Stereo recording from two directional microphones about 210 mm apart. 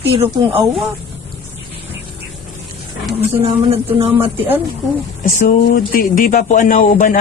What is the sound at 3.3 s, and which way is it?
Speech, 30° right (ahead or behind).